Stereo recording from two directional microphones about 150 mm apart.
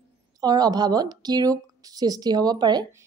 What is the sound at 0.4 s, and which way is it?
Speech, 25° right (ahead or behind).